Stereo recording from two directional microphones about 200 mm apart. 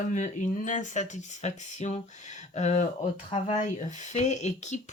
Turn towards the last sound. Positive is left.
turn(degrees=35)  # may be behind; listen again after turning